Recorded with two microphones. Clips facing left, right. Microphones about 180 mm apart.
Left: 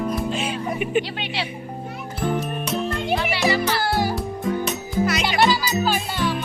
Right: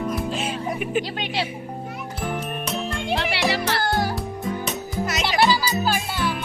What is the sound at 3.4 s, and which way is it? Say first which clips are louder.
Music: left 4 dB; 65° right (ahead or behind).